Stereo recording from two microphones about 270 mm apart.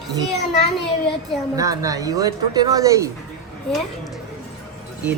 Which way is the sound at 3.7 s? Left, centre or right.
Centre.